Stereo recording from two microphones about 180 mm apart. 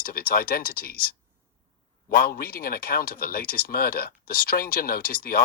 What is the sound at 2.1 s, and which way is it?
Speech, 55° left (ahead or behind).